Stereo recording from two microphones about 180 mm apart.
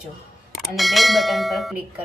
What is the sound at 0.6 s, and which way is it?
Speech, centre (ahead or behind).